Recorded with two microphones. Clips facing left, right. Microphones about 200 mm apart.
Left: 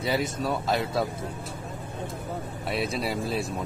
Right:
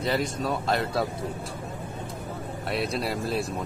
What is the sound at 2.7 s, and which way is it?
Speech, centre (ahead or behind).